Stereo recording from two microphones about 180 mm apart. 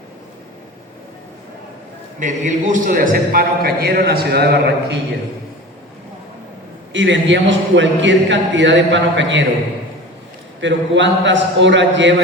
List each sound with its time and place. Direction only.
2.1 s a man's voice: 45° right (ahead or behind); by 4.9 s 65° right (ahead or behind)
6.9 s a man's voice: 85° right
10.6 s a man's voice: 85° right